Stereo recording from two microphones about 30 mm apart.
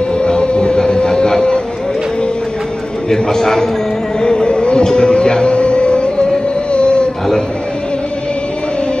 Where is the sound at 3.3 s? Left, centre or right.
Centre.